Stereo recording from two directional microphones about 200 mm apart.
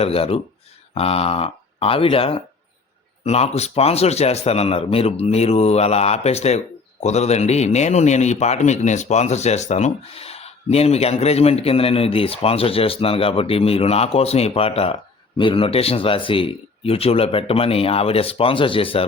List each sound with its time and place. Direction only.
0.0 s a man's voice: 30° left (ahead or behind)